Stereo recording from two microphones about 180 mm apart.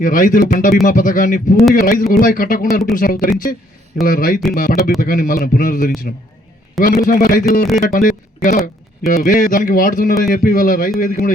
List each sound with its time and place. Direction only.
0.0 s speech: 50° left (ahead or behind)